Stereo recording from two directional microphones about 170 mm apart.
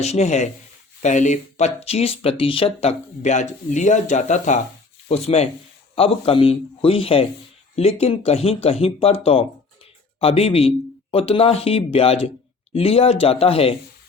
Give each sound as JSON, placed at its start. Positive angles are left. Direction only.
{"t": 0.0, "sound": "speech", "side_deg": 40}